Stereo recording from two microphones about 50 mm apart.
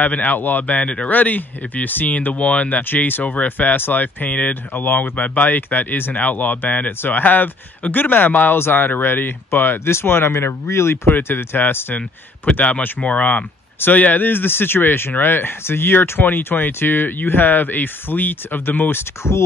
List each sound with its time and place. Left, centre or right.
0.0 s speech: left
4.8 s speech: left
5.1 s speech: left
10.4 s speech: left
11.1 s speech: left
13.7 s speech: left